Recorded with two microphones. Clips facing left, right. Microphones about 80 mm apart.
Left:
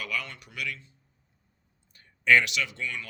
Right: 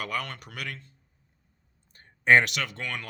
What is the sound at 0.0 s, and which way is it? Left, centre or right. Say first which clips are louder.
Speech: right 2 dB; right.